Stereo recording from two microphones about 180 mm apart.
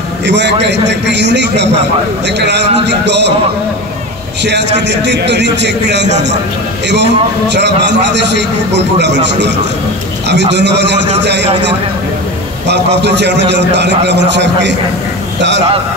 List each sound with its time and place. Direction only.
0.2 s a man's voice: 75° right (ahead or behind)
4.4 s a man's voice: 70° right (ahead or behind)
12.6 s a man's voice: 70° right (ahead or behind)